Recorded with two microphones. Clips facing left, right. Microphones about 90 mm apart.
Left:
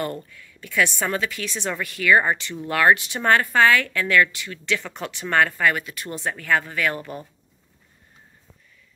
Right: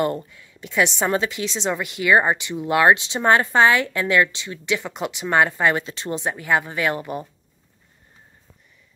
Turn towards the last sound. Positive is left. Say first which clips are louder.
# right 2 dB
turn(degrees=-20)  # may be behind; listen again after turning